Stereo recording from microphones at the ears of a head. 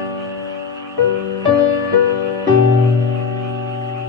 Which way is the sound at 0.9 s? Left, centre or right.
Left.